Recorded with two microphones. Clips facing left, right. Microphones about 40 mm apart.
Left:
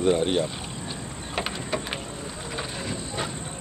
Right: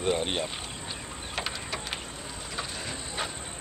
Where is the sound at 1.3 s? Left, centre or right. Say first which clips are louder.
Left 5 dB; centre.